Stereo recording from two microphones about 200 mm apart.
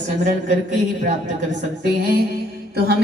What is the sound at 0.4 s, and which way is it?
A woman's voice, 40° right (ahead or behind).